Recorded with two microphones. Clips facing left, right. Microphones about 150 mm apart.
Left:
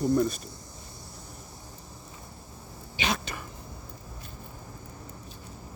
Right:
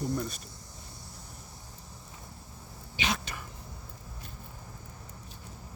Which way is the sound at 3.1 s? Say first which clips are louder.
Left 3 dB; 45° left (ahead or behind).